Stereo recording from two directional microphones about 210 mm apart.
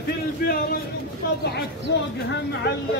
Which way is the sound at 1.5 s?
50° left (ahead or behind).